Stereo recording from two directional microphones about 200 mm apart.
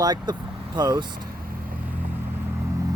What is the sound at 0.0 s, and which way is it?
Speech, 20° right (ahead or behind).